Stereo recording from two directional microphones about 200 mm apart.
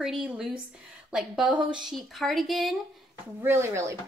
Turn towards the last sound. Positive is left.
turn(degrees=-15)  # may be behind; listen again after turning